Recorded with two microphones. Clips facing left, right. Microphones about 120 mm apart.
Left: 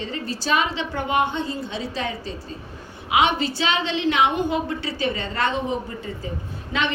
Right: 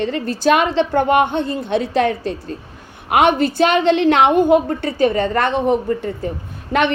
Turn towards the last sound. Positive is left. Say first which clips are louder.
# right 8 dB
turn(degrees=-55)  # may be behind; listen again after turning